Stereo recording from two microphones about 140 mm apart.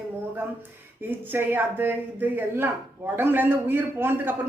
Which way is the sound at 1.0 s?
15° right (ahead or behind).